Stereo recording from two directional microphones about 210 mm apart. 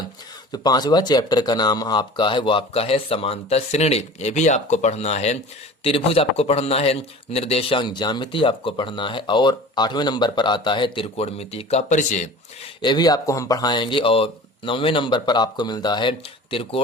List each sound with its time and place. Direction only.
0.5 s a man's voice: 20° left (ahead or behind); by 12.3 s 35° left (ahead or behind)
12.8 s a man's voice: 20° left (ahead or behind)